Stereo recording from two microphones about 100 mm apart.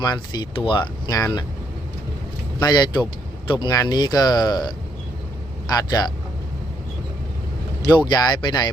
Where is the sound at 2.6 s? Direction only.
45° left (ahead or behind).